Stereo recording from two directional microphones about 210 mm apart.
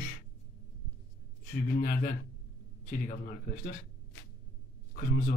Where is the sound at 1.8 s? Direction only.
45° left (ahead or behind).